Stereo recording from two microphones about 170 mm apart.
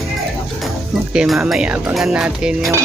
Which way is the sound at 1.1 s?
5° right (ahead or behind).